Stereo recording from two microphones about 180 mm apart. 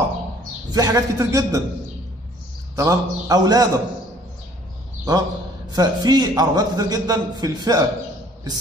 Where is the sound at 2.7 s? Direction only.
20° right (ahead or behind).